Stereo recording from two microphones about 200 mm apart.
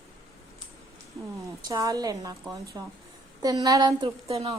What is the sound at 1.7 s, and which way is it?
A woman's voice, 15° right (ahead or behind).